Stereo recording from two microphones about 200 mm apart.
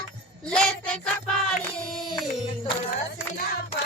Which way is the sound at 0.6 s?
5° left (ahead or behind).